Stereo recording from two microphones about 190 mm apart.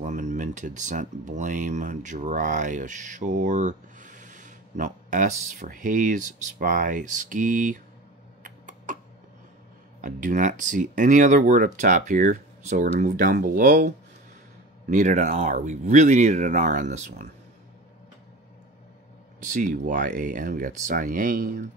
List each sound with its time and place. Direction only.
0.0 s speech: 40° right (ahead or behind)
8.5 s a sound: 40° right (ahead or behind)
10.0 s speech: 40° right (ahead or behind)
19.4 s speech: 45° right (ahead or behind)